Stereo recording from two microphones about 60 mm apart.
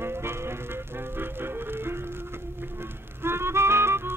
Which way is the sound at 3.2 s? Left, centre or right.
Right.